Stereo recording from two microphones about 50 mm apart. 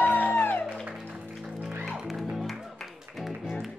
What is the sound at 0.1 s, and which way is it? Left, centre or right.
Music, left.